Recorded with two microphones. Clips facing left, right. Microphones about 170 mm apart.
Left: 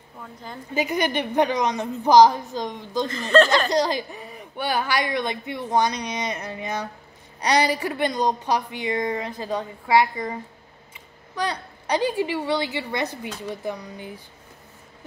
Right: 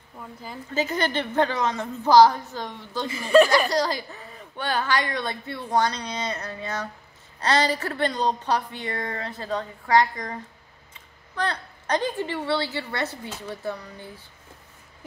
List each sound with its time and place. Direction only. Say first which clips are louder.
0.7 s speech: left 2 dB; 15° left (ahead or behind)
3.1 s speech: right 1 dB; 10° right (ahead or behind)
3.5 s speech: left 1 dB; 20° left (ahead or behind)